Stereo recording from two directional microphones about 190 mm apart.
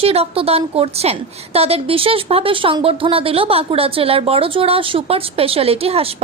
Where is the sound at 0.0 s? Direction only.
30° right (ahead or behind).